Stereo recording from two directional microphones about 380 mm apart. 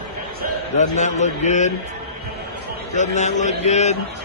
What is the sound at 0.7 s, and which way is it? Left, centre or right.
Speech, centre.